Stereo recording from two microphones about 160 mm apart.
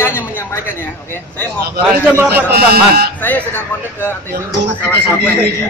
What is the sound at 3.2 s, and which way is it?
Speech, 10° left (ahead or behind).